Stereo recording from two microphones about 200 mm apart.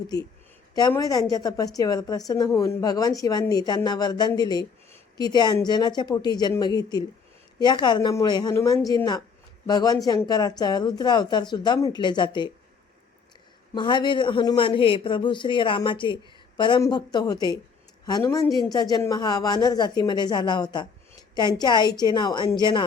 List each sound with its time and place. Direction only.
0.7 s a woman's voice: 20° left (ahead or behind)
13.7 s a woman's voice: 25° left (ahead or behind)